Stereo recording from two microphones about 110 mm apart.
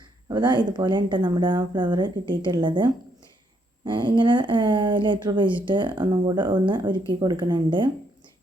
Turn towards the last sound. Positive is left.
turn(degrees=-45)  # may be behind; listen again after turning